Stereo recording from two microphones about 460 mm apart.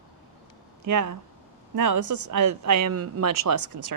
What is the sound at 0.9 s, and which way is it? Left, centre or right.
Speech, right.